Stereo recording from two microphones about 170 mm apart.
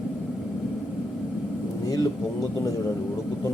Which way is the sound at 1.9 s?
20° left (ahead or behind).